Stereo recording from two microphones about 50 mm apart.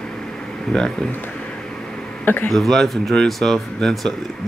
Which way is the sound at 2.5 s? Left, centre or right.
Centre.